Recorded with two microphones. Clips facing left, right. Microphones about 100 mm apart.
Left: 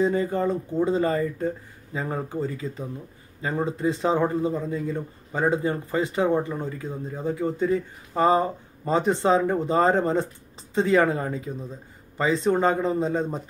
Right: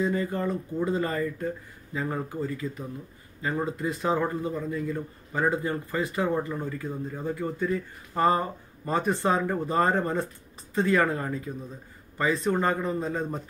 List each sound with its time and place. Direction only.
0.0 s speech: 25° left (ahead or behind)